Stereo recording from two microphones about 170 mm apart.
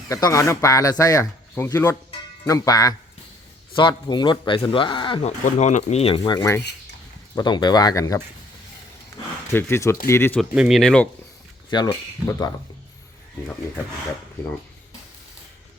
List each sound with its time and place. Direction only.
0.1 s speech: 20° left (ahead or behind)
2.0 s music: 25° left (ahead or behind)
3.8 s speech: 30° left (ahead or behind)
5.5 s speech: 45° left (ahead or behind); by 8.2 s 20° left (ahead or behind)
9.5 s speech: 15° left (ahead or behind)
10.5 s speech: 5° right (ahead or behind)
11.9 s speech: 15° left (ahead or behind)